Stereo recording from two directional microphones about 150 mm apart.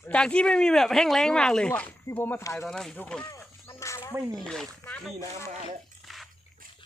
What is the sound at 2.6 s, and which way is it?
Speech, 5° left (ahead or behind).